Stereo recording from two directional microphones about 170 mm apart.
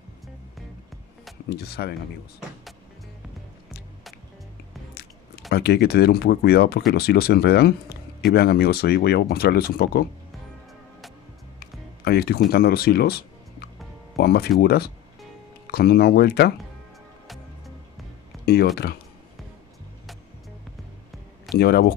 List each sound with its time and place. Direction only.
1.5 s speech: 70° left (ahead or behind)
5.5 s speech: 70° left (ahead or behind)
11.6 s music: 65° left (ahead or behind)
14.1 s speech: 65° left (ahead or behind)
18.4 s a sound: 65° left (ahead or behind)
21.5 s speech: 70° left (ahead or behind)